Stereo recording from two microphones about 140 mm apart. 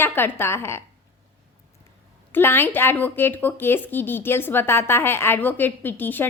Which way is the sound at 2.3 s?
15° left (ahead or behind).